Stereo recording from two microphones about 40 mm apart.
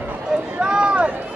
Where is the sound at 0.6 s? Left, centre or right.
Right.